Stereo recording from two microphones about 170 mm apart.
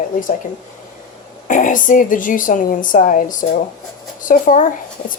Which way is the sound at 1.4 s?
50° left (ahead or behind).